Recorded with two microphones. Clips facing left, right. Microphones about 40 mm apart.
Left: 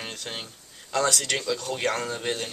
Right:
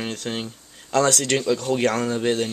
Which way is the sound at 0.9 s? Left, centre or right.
Right.